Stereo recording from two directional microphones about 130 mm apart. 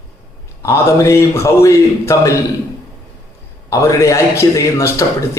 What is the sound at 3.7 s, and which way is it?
A man's voice, 25° left (ahead or behind).